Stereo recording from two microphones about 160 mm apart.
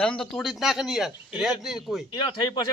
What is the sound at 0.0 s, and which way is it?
A man's voice, 5° left (ahead or behind).